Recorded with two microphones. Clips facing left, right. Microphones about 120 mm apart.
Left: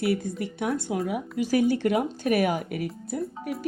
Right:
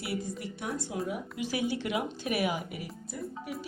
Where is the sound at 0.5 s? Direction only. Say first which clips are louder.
Left 10 dB; 65° left (ahead or behind).